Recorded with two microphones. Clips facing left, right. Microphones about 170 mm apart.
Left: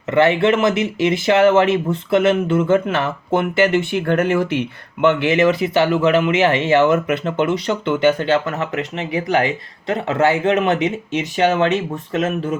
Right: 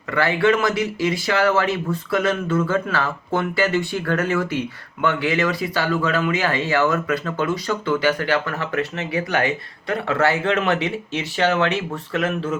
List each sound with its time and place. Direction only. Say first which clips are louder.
0.1 s speech: left 4 dB; 20° left (ahead or behind)